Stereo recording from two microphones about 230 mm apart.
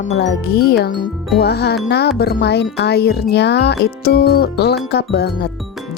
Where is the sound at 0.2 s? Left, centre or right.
Left.